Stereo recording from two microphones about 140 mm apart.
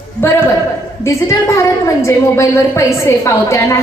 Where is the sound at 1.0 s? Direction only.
20° left (ahead or behind).